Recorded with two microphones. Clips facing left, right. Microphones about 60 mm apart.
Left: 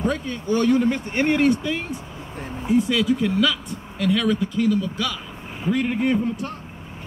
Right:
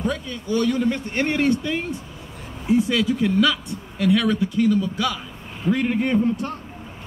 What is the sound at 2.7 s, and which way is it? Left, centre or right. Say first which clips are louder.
A man's voice: even; centre.